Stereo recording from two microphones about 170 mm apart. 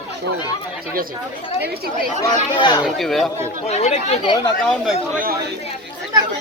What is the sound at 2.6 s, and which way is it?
Speech, 25° left (ahead or behind).